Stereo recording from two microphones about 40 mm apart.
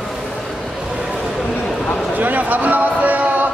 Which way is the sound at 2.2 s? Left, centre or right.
Right.